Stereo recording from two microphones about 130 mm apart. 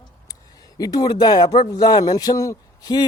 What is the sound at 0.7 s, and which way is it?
A man's voice, 30° left (ahead or behind).